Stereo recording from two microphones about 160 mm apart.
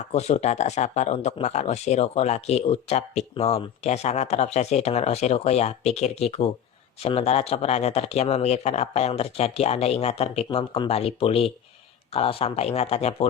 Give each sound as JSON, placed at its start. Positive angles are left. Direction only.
{"t": 0.1, "sound": "speech", "side_deg": 45}